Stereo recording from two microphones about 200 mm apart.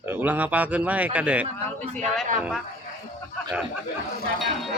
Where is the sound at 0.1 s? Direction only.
10° right (ahead or behind).